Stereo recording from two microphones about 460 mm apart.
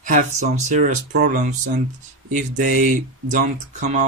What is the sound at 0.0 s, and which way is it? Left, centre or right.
Speech, centre.